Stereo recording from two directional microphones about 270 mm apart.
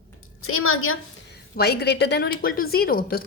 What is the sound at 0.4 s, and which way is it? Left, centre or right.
Speech, left.